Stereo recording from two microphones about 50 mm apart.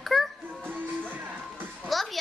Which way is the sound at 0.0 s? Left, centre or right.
Centre.